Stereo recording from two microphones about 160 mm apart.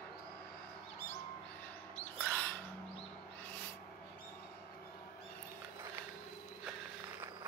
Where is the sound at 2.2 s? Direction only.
10° left (ahead or behind).